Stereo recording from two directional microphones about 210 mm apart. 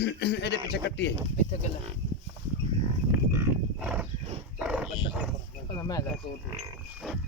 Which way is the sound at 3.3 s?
10° right (ahead or behind).